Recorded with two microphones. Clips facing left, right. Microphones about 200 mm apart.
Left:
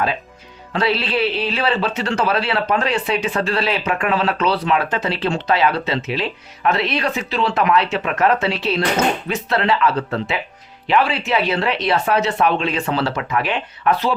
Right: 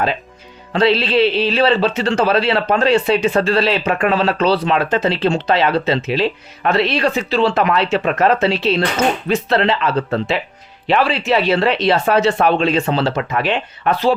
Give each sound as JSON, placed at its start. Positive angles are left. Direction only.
{"t": 0.7, "sound": "speech", "side_deg": -25}